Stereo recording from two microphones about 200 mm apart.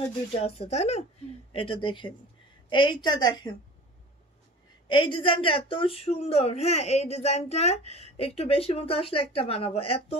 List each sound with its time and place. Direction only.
0.3 s speech: 30° left (ahead or behind)
4.8 s speech: 25° left (ahead or behind)